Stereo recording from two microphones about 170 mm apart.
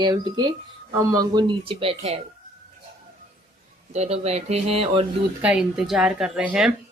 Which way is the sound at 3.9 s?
40° right (ahead or behind).